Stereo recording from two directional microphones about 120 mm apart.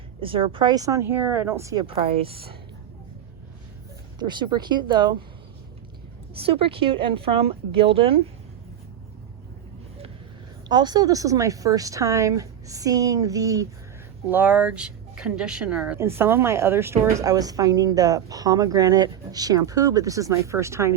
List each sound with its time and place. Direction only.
0.2 s a woman's voice: 45° right (ahead or behind); by 1.8 s 25° right (ahead or behind)
1.8 s speech: 50° right (ahead or behind)
4.2 s speech: 40° right (ahead or behind)
6.4 s speech: 50° right (ahead or behind)
10.7 s a woman's voice: 35° right (ahead or behind)
14.3 s a woman's voice: 15° right (ahead or behind)
16.0 s a woman's voice: 20° right (ahead or behind)